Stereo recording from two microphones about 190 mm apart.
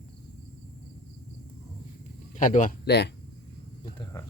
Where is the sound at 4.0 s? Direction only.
15° left (ahead or behind).